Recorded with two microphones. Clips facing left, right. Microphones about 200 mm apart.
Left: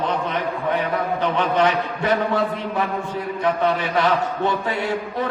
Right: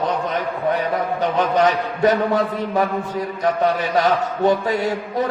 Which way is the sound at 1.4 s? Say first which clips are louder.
Right 3 dB; 40° right (ahead or behind).